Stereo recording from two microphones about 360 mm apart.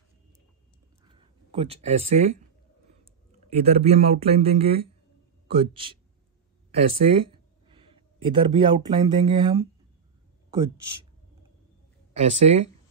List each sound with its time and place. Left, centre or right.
1.0 s a sound: centre
3.4 s speech: centre
12.1 s speech: centre